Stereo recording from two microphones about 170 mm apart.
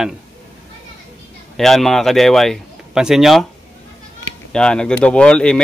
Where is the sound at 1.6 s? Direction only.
Centre (ahead or behind).